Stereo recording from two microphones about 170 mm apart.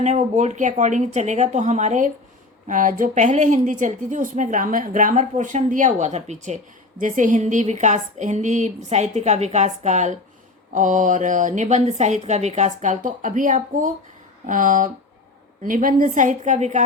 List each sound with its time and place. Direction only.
0.0 s a woman's voice: 40° right (ahead or behind)